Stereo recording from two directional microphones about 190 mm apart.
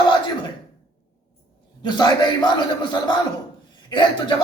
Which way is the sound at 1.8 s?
20° left (ahead or behind).